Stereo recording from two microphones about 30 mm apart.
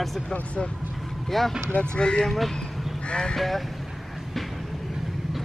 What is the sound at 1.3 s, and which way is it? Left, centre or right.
Speech, centre.